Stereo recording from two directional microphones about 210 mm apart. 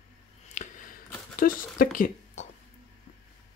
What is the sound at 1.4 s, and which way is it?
Speech, 40° left (ahead or behind).